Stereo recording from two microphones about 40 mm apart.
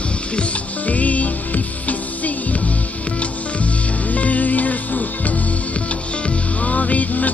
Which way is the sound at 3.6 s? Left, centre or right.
Left.